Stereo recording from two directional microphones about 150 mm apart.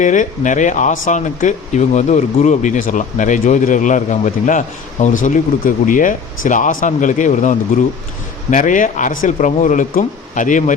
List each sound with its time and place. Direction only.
0.0 s speech: 55° left (ahead or behind)